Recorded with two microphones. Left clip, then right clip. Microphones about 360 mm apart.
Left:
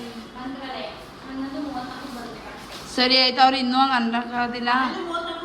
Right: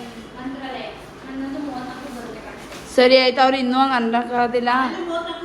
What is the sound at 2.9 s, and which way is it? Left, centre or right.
A woman's voice, centre.